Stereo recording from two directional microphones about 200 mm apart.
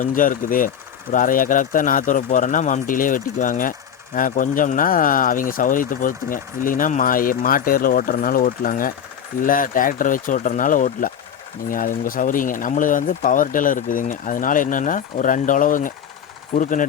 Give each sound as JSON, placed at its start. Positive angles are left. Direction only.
{"t": 0.0, "sound": "speech", "side_deg": 40}